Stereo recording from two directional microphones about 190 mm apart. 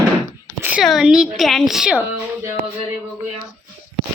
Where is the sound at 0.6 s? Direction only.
5° right (ahead or behind).